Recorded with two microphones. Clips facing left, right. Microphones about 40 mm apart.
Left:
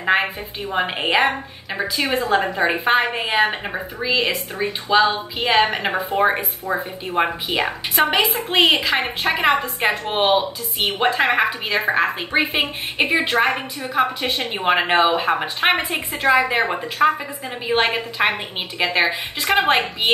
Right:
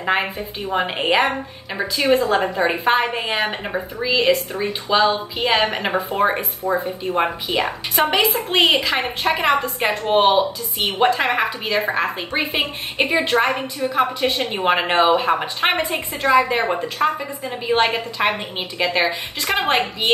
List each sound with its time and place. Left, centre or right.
0.0 s a woman's voice: centre
15.7 s a woman's voice: centre